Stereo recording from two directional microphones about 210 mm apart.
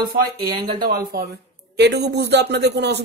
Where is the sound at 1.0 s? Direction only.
50° right (ahead or behind).